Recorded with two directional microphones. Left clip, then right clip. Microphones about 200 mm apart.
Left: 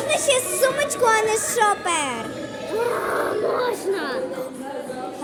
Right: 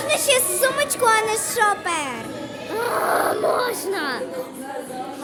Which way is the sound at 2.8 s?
30° right (ahead or behind).